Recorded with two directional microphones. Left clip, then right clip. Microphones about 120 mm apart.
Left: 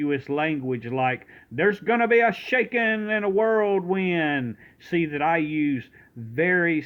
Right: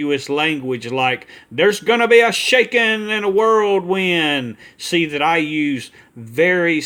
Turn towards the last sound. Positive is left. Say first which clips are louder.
# right 7 dB
turn(degrees=-25)  # may be behind; listen again after turning